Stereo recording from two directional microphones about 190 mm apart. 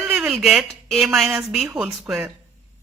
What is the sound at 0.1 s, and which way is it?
Speech, centre (ahead or behind).